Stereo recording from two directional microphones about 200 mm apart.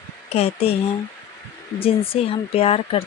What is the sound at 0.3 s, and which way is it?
Speech, 30° left (ahead or behind).